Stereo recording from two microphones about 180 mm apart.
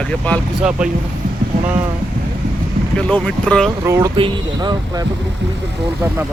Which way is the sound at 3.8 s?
15° right (ahead or behind).